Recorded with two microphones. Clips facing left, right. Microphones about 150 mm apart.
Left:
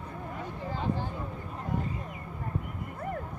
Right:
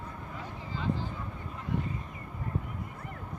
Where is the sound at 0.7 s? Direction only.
55° left (ahead or behind).